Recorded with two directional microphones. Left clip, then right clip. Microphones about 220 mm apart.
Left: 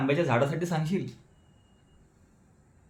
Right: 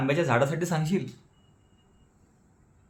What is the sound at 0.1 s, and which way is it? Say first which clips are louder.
Speech: right 2 dB; 25° right (ahead or behind).